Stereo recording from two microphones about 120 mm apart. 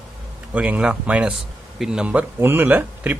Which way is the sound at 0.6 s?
10° right (ahead or behind).